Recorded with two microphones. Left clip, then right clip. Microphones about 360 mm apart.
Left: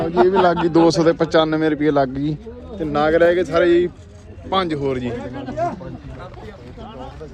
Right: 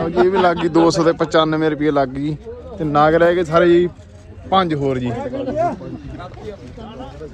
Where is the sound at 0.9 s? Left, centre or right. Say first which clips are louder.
Even; centre.